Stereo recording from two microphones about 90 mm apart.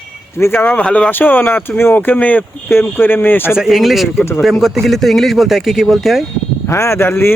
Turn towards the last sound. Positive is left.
turn(degrees=25)  # may be behind; listen again after turning